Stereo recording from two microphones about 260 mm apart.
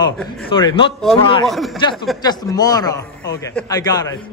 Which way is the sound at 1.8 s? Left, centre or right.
Centre.